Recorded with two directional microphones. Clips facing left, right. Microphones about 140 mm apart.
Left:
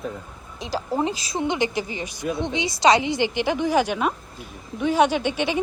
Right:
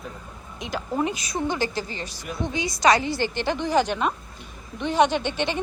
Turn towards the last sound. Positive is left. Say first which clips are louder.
# left 2 dB
turn(degrees=10)  # may be behind; listen again after turning